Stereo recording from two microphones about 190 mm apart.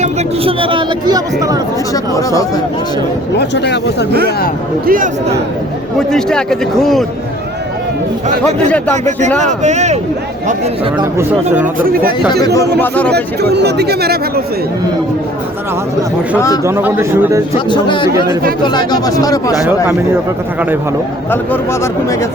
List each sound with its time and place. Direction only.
0.0 s speech: 30° right (ahead or behind)
1.9 s speech: 15° left (ahead or behind)
3.3 s speech: 65° left (ahead or behind)
4.9 s a man's voice: 50° right (ahead or behind)
6.1 s a man's voice: 5° left (ahead or behind)
9.4 s speech: 40° right (ahead or behind)
11.0 s a man's voice: 10° right (ahead or behind)
11.8 s a man's voice: 50° right (ahead or behind)
12.8 s speech: 10° left (ahead or behind)
13.1 s speech: 60° right (ahead or behind)
16.6 s a man's voice: 15° right (ahead or behind)
17.7 s speech: 25° left (ahead or behind)
21.2 s speech: 10° left (ahead or behind)